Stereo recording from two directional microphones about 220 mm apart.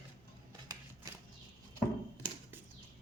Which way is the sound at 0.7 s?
15° right (ahead or behind).